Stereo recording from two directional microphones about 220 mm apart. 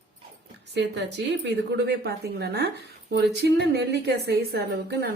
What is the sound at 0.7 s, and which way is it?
A woman's voice, 50° right (ahead or behind).